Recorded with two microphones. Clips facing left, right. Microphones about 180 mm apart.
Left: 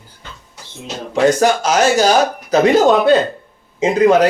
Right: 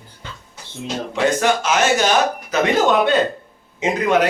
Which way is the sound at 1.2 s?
40° left (ahead or behind).